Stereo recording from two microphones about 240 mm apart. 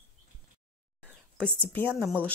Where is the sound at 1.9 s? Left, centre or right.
Centre.